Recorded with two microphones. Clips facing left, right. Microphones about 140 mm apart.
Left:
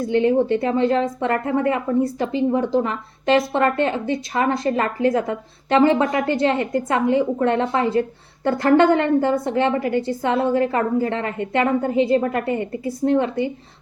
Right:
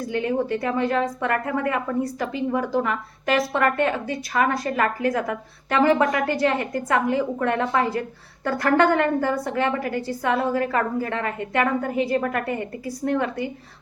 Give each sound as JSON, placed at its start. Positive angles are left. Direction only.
{"t": 0.1, "sound": "a woman's voice", "side_deg": 25}